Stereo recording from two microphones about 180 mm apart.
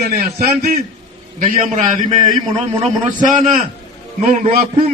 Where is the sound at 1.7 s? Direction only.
45° right (ahead or behind).